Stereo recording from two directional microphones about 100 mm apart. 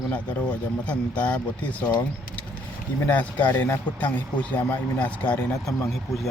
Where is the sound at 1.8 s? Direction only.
45° left (ahead or behind).